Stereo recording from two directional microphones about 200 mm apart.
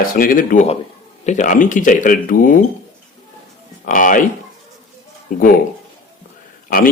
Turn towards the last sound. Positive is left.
turn(degrees=45)  # may be behind; listen again after turning